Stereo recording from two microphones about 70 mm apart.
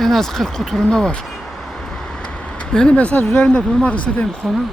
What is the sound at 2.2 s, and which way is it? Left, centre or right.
Vehicle, centre.